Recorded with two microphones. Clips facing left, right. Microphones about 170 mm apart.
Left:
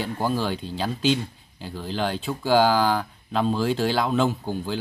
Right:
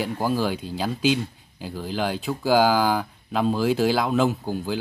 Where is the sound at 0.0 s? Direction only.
10° right (ahead or behind).